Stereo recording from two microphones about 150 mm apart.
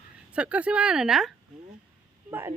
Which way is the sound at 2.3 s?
15° right (ahead or behind).